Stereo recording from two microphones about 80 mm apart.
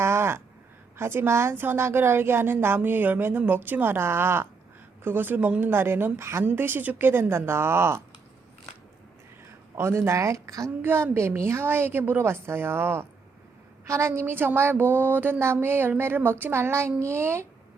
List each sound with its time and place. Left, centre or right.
0.0 s a sound: right
0.9 s a woman's voice: right
6.4 s a woman's voice: right
9.7 s a woman's voice: right
10.8 s a woman's voice: right